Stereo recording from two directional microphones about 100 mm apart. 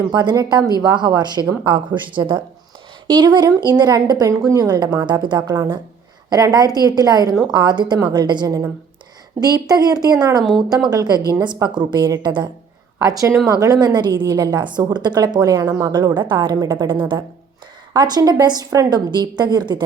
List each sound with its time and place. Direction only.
0.1 s a woman's voice: 40° right (ahead or behind)
13.1 s a woman's voice: 35° right (ahead or behind); by 17.2 s 55° right (ahead or behind)
17.9 s a woman's voice: 45° right (ahead or behind)